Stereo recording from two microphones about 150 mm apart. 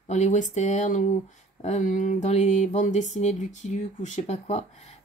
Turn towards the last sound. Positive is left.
turn(degrees=50)  # may be behind; listen again after turning